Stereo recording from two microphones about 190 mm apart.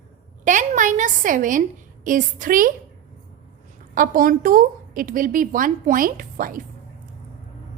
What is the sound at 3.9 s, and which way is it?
A woman's voice, 45° right (ahead or behind).